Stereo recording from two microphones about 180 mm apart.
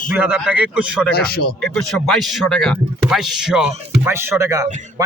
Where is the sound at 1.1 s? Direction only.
60° left (ahead or behind).